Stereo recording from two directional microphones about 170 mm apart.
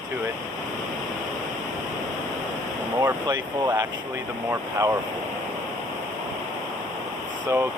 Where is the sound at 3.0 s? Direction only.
20° right (ahead or behind).